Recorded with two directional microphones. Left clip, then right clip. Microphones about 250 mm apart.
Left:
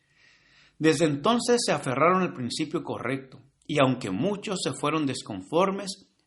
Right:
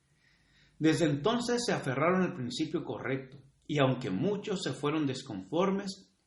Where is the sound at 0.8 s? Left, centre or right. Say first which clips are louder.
Left 5 dB; left.